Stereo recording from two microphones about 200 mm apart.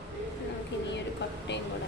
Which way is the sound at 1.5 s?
60° left (ahead or behind).